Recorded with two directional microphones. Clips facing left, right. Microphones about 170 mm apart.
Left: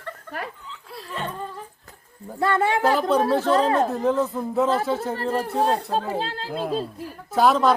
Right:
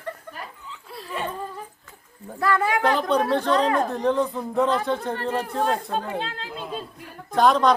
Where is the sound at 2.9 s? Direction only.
5° left (ahead or behind).